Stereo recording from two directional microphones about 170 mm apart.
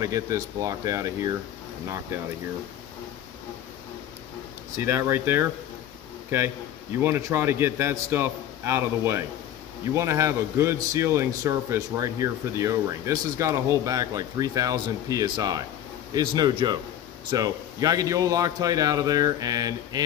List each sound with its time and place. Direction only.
0.0 s a man's voice: 20° right (ahead or behind)
4.7 s a man's voice: 15° right (ahead or behind)